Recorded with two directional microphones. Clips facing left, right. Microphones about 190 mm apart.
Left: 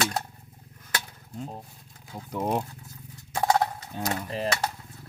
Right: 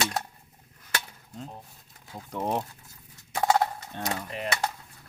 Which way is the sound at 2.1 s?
Centre (ahead or behind).